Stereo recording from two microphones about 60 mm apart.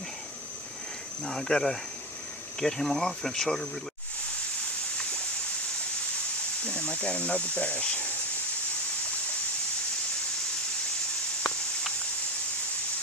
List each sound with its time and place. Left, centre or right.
1.2 s speech: centre
6.6 s speech: left
11.4 s a sound: centre